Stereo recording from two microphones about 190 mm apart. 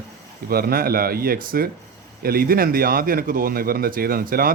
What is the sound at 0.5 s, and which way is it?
Speech, 50° right (ahead or behind).